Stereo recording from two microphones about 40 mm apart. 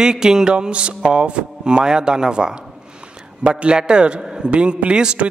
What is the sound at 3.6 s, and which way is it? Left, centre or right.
Speech, right.